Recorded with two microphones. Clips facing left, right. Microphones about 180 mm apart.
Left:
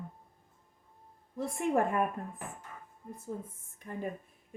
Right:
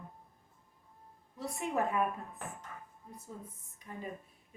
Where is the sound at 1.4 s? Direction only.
50° left (ahead or behind).